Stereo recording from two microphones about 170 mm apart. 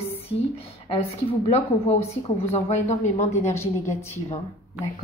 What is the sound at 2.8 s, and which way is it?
Speech, 45° left (ahead or behind).